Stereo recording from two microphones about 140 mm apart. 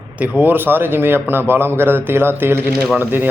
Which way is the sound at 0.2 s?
15° right (ahead or behind).